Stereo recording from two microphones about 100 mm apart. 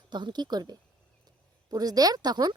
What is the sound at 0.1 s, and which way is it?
A woman's voice, 50° right (ahead or behind).